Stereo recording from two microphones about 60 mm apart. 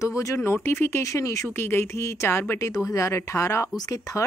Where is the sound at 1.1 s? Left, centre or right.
Left.